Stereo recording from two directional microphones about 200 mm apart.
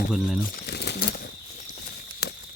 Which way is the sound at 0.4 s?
50° left (ahead or behind).